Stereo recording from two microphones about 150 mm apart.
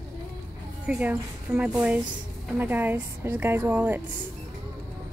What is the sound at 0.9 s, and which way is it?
A woman's voice, 10° right (ahead or behind).